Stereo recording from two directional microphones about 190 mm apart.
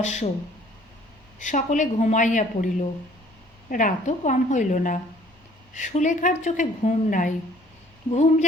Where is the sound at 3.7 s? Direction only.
45° left (ahead or behind).